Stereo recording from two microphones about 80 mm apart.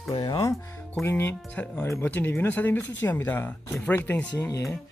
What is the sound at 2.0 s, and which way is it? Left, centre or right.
Speech, left.